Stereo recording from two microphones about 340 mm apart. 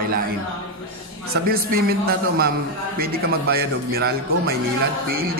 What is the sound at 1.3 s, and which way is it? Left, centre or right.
A man's voice, right.